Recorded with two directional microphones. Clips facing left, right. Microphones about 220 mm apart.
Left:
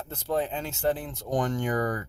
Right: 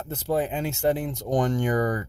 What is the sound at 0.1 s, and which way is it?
Speech, 10° right (ahead or behind).